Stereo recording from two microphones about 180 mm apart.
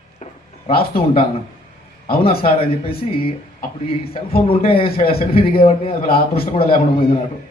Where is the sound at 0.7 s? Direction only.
55° left (ahead or behind).